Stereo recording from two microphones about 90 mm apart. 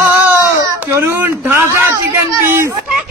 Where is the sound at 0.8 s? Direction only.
30° right (ahead or behind).